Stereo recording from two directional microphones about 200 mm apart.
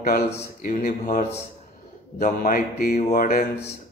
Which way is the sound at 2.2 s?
45° left (ahead or behind).